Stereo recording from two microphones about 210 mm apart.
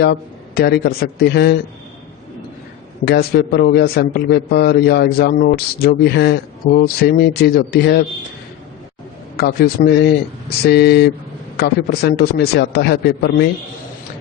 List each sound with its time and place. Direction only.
0.0 s a man's voice: 50° left (ahead or behind)
3.0 s a man's voice: 50° left (ahead or behind)
9.4 s a man's voice: 50° left (ahead or behind)